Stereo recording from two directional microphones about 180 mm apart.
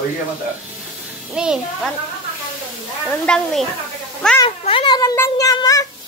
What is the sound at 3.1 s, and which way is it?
Speech, 5° left (ahead or behind).